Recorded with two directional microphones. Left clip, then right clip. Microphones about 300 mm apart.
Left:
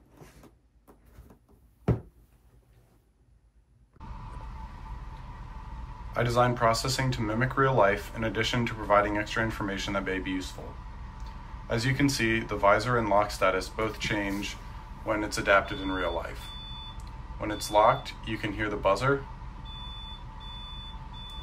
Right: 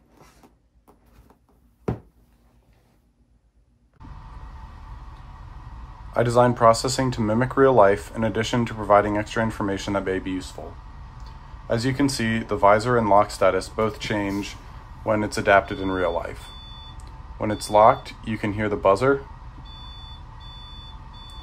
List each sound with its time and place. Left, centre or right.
6.1 s speech: centre
11.7 s speech: centre
17.4 s speech: centre